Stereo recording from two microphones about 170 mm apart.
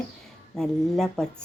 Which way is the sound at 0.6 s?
5° left (ahead or behind).